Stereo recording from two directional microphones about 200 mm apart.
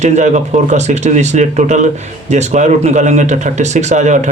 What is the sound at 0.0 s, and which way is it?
Speech, 35° right (ahead or behind).